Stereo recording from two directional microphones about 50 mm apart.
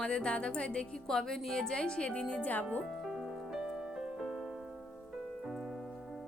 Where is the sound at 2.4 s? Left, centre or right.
Left.